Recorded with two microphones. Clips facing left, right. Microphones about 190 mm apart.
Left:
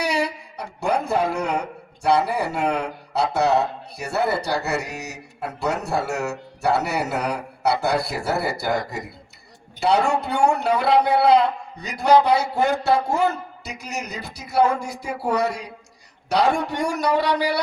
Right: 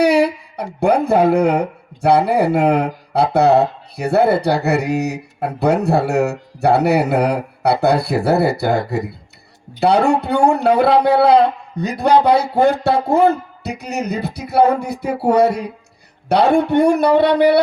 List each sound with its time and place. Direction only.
0.0 s a man's voice: 60° right (ahead or behind)